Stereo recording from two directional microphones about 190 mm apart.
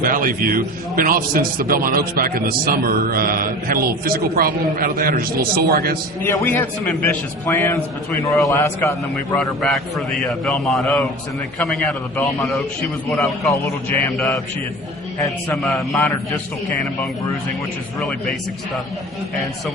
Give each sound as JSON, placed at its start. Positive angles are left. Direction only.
{"t": 0.0, "sound": "a man's voice", "side_deg": -45}
{"t": 6.2, "sound": "a man's voice", "side_deg": 10}
{"t": 9.1, "sound": "a man's voice", "side_deg": 0}
{"t": 15.5, "sound": "a man's voice", "side_deg": 0}